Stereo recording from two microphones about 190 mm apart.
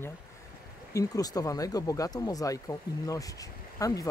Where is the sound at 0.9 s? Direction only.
20° left (ahead or behind).